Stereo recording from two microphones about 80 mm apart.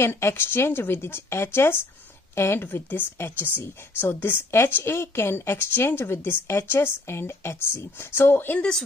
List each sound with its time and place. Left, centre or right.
0.0 s a woman's voice: left